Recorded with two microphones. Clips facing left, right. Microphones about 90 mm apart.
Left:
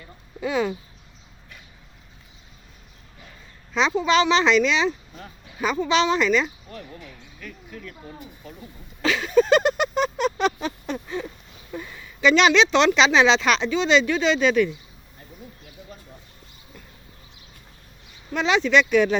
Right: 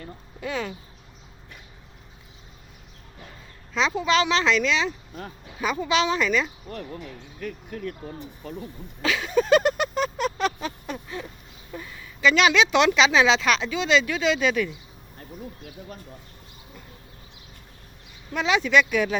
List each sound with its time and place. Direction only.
0.3 s speech: 10° left (ahead or behind)
3.8 s speech: centre (ahead or behind)
6.7 s speech: 50° right (ahead or behind)
9.0 s a sound: 5° right (ahead or behind)
11.7 s speech: centre (ahead or behind)
18.3 s speech: 5° right (ahead or behind)